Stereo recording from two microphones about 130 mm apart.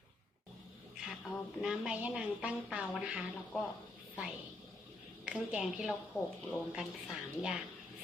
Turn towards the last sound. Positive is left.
turn(degrees=-5)  # may be behind; listen again after turning